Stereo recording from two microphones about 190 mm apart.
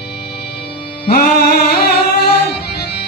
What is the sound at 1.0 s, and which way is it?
Music, 55° left (ahead or behind).